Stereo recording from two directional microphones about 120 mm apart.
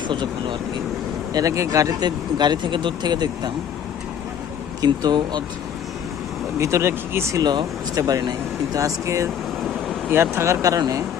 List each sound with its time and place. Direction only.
0.1 s speech: 45° right (ahead or behind)
1.3 s speech: 30° right (ahead or behind)
4.8 s speech: 35° right (ahead or behind)
6.6 s speech: 25° right (ahead or behind)
7.4 s speech: 35° right (ahead or behind)